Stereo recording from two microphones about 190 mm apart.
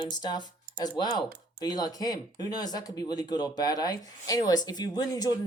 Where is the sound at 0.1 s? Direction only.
20° left (ahead or behind).